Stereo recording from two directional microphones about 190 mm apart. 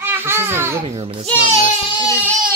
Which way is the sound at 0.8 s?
30° right (ahead or behind).